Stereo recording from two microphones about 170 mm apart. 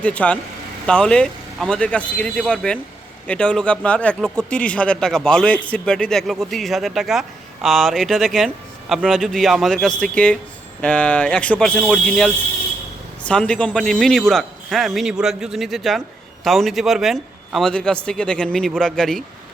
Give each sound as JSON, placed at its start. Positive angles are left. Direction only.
{"t": 0.0, "sound": "a man's voice", "side_deg": 10}